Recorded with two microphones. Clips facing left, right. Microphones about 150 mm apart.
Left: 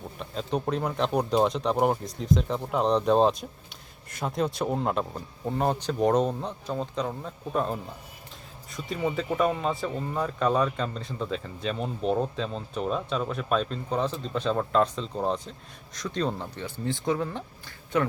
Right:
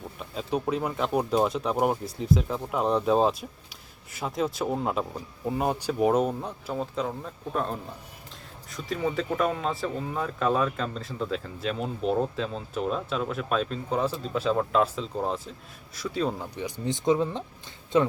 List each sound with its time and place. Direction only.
0.2 s speech: 5° right (ahead or behind); by 18.1 s 25° right (ahead or behind)